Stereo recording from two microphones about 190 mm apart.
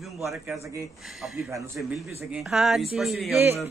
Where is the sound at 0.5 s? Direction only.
15° right (ahead or behind).